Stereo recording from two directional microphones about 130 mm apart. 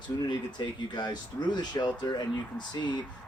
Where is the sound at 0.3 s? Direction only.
35° left (ahead or behind).